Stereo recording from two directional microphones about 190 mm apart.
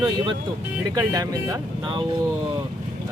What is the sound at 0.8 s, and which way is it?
Speech, 20° right (ahead or behind).